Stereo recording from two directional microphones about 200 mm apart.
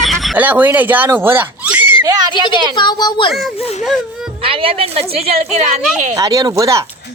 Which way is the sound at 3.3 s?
Centre (ahead or behind).